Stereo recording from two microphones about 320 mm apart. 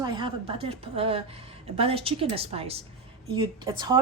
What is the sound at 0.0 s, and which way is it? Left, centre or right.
A woman's voice, centre.